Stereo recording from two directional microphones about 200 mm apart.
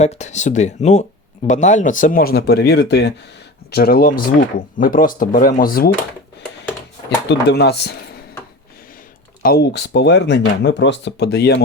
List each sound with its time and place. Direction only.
0.0 s speech: 35° left (ahead or behind)
7.3 s speech: 55° left (ahead or behind)
9.4 s speech: 50° left (ahead or behind)